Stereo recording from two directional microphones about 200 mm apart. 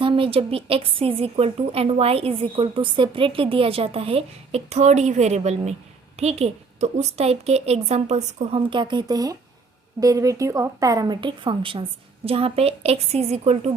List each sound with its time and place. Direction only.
0.0 s a woman's voice: 25° right (ahead or behind)